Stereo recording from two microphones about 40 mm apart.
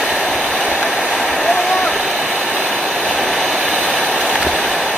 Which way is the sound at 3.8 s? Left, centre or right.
Left.